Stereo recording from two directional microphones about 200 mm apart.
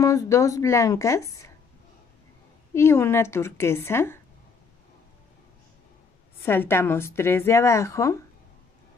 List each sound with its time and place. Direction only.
0.0 s a woman's voice: 15° left (ahead or behind)
2.7 s a woman's voice: 15° left (ahead or behind)
6.4 s a woman's voice: 10° left (ahead or behind)